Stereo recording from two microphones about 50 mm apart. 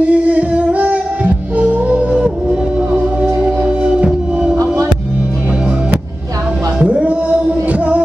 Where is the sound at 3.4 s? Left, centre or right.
Right.